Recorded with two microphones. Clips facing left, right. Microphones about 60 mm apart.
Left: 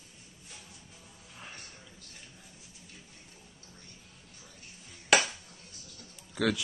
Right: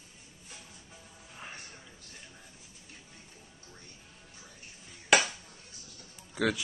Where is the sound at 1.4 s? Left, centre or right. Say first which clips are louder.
Right 2 dB; right.